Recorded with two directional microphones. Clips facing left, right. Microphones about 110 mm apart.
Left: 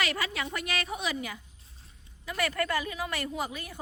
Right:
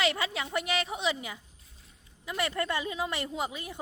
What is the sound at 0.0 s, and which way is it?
A woman's voice, 25° right (ahead or behind).